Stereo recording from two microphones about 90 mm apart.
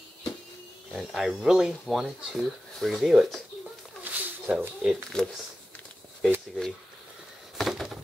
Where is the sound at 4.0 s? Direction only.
20° right (ahead or behind).